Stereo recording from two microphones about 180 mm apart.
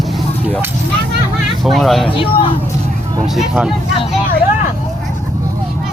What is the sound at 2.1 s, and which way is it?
Speech, 30° left (ahead or behind).